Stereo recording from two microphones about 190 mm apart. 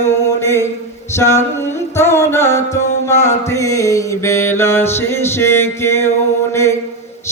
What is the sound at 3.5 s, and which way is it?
Mantra, 15° left (ahead or behind).